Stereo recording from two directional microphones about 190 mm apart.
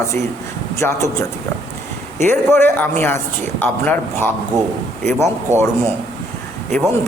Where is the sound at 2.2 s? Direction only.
10° left (ahead or behind).